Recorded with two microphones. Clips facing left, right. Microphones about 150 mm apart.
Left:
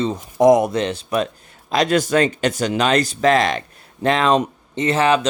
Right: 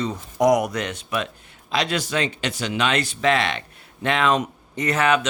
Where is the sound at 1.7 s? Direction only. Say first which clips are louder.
Left 7 dB; 45° left (ahead or behind).